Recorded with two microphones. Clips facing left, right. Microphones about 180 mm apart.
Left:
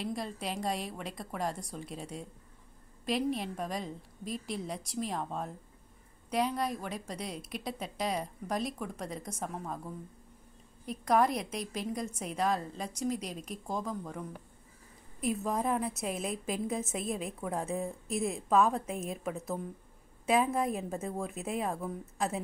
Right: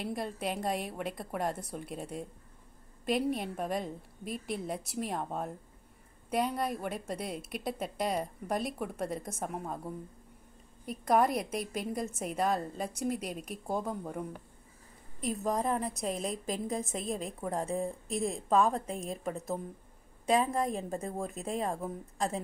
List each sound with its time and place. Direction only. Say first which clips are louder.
0.0 s a woman's voice: right 1 dB; 55° right (ahead or behind)
0.5 s a woman's voice: right 1 dB; centre (ahead or behind)
3.3 s a woman's voice: right 2 dB; 5° right (ahead or behind)
3.8 s a woman's voice: right 1 dB; 55° right (ahead or behind)
4.6 s a woman's voice: right 1 dB; 5° right (ahead or behind)
6.3 s a woman's voice: even; centre (ahead or behind)
10.9 s a woman's voice: even; centre (ahead or behind)
15.1 s a woman's voice: even; centre (ahead or behind)